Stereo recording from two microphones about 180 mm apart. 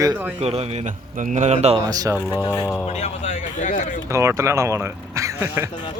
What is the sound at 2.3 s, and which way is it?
Speech, 15° left (ahead or behind).